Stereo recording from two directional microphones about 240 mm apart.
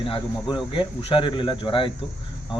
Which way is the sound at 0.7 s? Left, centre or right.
Left.